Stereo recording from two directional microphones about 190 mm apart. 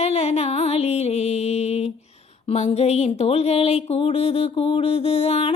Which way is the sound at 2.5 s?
35° left (ahead or behind).